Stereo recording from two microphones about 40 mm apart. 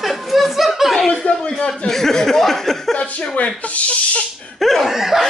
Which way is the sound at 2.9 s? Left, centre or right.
Left.